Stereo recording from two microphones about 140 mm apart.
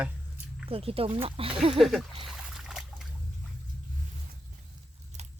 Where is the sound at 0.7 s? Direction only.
40° right (ahead or behind).